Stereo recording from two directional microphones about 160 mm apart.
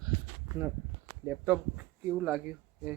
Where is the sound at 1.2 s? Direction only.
15° right (ahead or behind).